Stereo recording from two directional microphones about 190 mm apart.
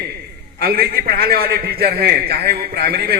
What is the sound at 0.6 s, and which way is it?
A man's voice, 50° right (ahead or behind).